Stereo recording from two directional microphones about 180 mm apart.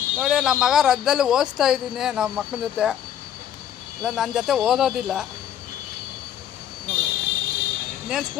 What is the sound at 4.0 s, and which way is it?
A man's voice, 5° right (ahead or behind).